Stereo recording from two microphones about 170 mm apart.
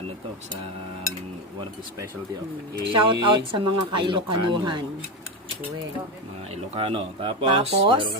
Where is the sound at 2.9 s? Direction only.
30° right (ahead or behind).